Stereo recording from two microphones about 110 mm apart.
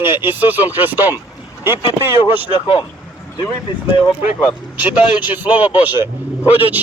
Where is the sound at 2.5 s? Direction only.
50° left (ahead or behind).